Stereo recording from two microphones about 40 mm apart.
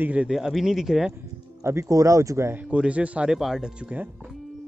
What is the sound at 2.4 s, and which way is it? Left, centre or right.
Speech, right.